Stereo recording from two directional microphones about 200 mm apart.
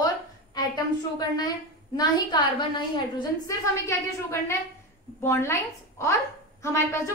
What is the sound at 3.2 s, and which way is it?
A woman's voice, 15° left (ahead or behind).